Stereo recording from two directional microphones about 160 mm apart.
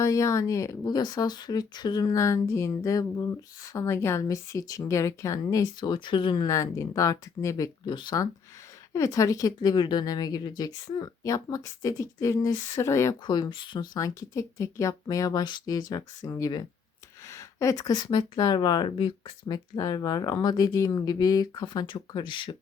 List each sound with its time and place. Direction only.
0.0 s speech: 20° left (ahead or behind)